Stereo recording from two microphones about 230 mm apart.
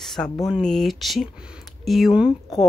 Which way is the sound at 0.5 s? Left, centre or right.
Centre.